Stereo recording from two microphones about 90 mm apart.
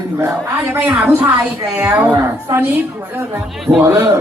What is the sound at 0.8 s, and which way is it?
Speech, 15° right (ahead or behind).